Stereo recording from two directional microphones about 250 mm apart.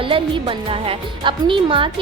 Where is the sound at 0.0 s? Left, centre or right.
Centre.